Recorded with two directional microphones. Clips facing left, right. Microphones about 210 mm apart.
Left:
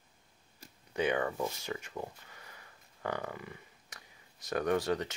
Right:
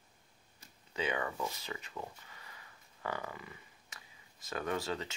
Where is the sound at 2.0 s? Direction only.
40° left (ahead or behind).